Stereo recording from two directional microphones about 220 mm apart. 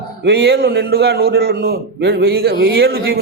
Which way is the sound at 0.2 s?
50° right (ahead or behind).